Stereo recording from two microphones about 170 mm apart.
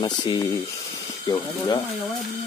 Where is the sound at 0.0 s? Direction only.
25° left (ahead or behind).